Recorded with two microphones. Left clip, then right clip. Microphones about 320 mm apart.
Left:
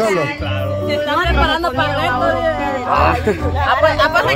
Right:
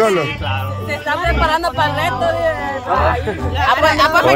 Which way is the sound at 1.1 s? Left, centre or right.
Centre.